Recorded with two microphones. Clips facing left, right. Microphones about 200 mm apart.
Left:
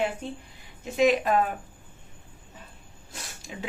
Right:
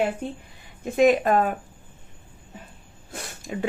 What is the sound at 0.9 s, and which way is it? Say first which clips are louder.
Speech: right 4 dB; 50° right (ahead or behind).